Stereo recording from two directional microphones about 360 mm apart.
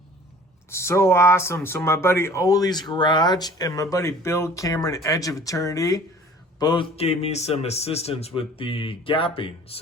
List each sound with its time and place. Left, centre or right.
0.7 s speech: centre